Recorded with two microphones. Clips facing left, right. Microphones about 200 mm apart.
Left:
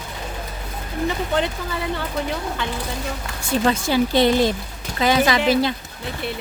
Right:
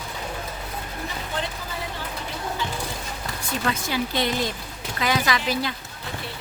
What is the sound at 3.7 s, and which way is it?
Speech, 30° left (ahead or behind).